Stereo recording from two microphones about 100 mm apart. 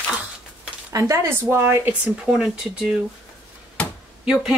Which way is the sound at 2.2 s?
5° right (ahead or behind).